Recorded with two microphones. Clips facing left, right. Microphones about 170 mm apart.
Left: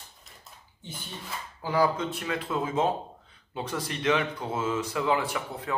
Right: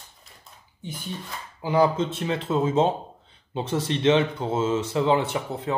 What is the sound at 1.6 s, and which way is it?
Speech, 20° right (ahead or behind).